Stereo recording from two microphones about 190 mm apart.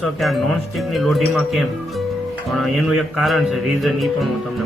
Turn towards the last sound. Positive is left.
turn(degrees=0)  # may be behind; listen again after turning